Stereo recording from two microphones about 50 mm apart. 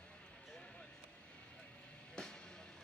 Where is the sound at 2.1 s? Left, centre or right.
Centre.